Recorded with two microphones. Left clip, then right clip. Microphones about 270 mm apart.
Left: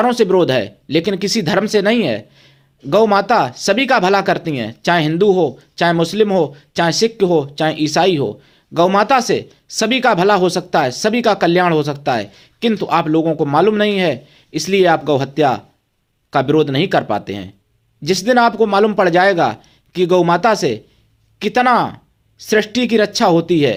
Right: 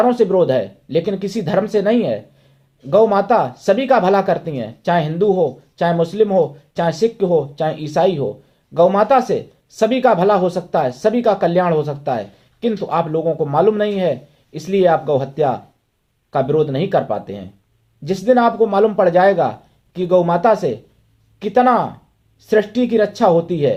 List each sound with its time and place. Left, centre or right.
0.0 s speech: left